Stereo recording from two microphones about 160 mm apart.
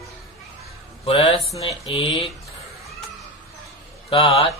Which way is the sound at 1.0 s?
35° left (ahead or behind).